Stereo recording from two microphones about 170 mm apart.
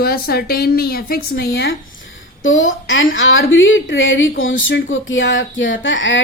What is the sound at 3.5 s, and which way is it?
A woman's voice, 90° left.